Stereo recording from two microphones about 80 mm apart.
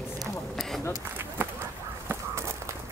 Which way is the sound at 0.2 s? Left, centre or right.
Centre.